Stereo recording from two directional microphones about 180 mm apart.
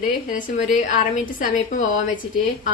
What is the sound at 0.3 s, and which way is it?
A woman's voice, 45° left (ahead or behind).